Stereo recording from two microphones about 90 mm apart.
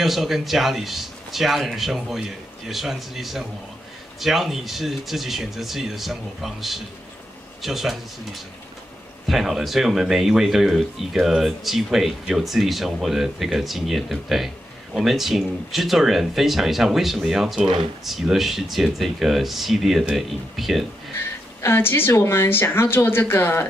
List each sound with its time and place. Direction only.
0.0 s speech: centre (ahead or behind)
21.2 s speech: 25° left (ahead or behind)